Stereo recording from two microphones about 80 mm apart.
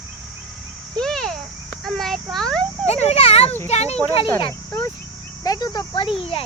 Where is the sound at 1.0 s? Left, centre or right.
Centre.